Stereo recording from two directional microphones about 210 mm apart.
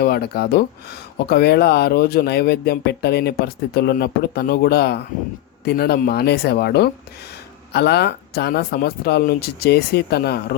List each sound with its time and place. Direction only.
0.0 s speech: 50° left (ahead or behind)